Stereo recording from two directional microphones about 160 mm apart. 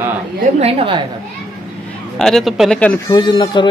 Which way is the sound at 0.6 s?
40° right (ahead or behind).